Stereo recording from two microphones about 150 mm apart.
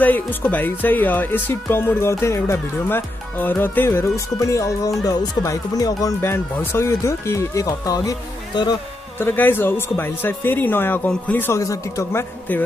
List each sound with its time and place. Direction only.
0.0 s speech: 15° left (ahead or behind)
9.2 s speech: 15° left (ahead or behind)